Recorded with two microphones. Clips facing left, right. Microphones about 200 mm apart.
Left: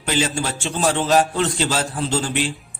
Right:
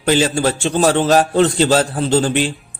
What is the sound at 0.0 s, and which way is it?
Speech, 35° right (ahead or behind).